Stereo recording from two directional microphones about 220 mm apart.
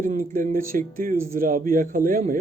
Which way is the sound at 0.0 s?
40° right (ahead or behind).